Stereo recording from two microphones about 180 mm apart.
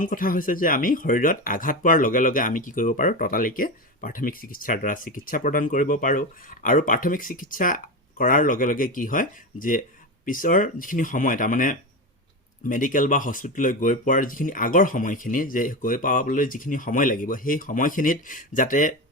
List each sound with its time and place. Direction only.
0.0 s speech: 50° left (ahead or behind)